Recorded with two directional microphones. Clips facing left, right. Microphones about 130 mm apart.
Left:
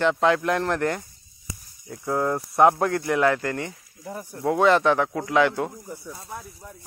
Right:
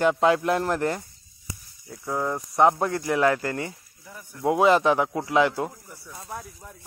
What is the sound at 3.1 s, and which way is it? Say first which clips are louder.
Mantra: right 1 dB; 35° right (ahead or behind).